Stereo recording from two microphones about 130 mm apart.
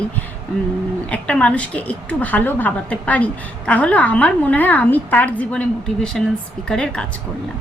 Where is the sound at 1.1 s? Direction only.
10° left (ahead or behind).